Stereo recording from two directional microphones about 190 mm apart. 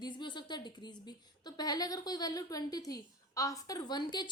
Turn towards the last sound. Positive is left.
turn(degrees=25)  # may be behind; listen again after turning